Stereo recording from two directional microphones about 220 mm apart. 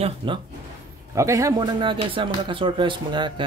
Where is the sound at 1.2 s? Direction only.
15° right (ahead or behind).